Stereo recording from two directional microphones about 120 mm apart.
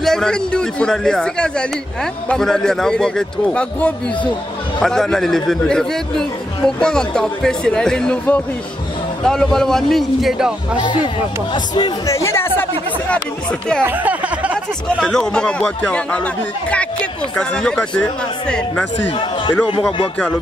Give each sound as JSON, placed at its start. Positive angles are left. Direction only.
{"t": 0.0, "sound": "speech", "side_deg": 5}
{"t": 10.8, "sound": "speech", "side_deg": 40}
{"t": 12.1, "sound": "speech", "side_deg": 25}
{"t": 13.1, "sound": "speech", "side_deg": 5}
{"t": 13.8, "sound": "a sound", "side_deg": -15}
{"t": 15.0, "sound": "speech", "side_deg": 5}